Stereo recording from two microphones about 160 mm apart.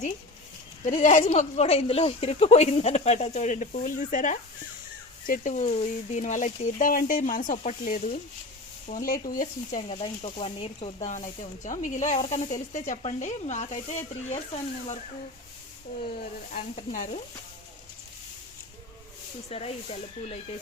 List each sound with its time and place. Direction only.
0.9 s speech: 50° left (ahead or behind)
1.2 s speech: 40° left (ahead or behind); by 9.8 s 55° left (ahead or behind)
9.9 s speech: 35° left (ahead or behind)
16.5 s speech: 50° left (ahead or behind)
19.5 s speech: 40° left (ahead or behind)